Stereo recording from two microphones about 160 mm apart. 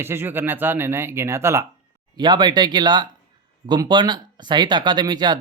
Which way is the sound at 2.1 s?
30° right (ahead or behind).